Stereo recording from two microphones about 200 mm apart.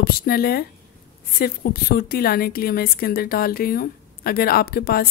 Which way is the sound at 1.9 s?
50° left (ahead or behind).